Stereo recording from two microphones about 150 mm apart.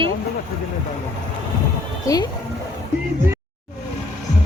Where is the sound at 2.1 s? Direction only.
20° left (ahead or behind).